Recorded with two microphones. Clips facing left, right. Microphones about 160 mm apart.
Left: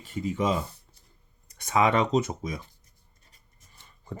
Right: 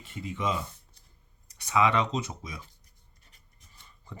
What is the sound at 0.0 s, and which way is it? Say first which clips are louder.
Speech: left 5 dB; 40° left (ahead or behind).